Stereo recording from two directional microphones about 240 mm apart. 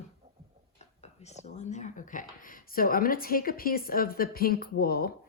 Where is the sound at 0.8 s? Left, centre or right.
Left.